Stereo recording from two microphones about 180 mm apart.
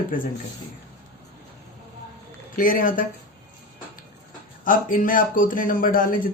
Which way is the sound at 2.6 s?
50° left (ahead or behind).